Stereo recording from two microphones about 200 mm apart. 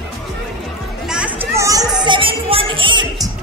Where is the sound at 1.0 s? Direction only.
5° right (ahead or behind).